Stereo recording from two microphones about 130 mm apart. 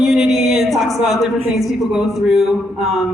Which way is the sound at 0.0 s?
Centre (ahead or behind).